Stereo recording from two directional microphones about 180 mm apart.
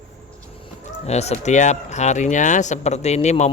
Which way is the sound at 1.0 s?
35° left (ahead or behind).